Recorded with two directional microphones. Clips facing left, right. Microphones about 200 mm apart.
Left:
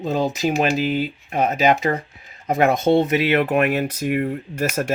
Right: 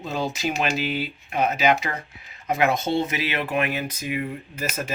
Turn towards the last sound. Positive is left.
turn(degrees=70)  # may be behind; listen again after turning